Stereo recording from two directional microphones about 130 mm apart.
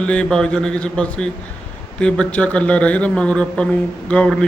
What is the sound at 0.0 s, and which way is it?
Speech, 10° left (ahead or behind).